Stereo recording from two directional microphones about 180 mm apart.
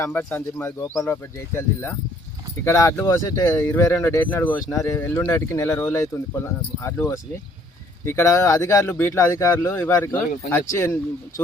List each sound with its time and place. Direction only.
0.0 s speech: 10° left (ahead or behind)